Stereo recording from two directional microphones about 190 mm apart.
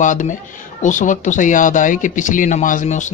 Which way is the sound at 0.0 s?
40° left (ahead or behind).